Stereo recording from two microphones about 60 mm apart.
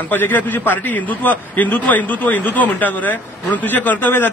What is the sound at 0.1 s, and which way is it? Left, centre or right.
A man's voice, left.